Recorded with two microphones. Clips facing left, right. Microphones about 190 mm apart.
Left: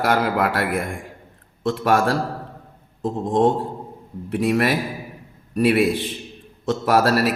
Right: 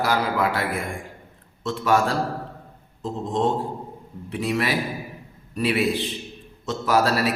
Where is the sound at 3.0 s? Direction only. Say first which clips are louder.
Left 5 dB; 55° left (ahead or behind).